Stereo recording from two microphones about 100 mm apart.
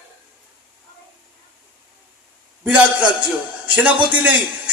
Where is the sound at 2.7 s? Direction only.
10° right (ahead or behind).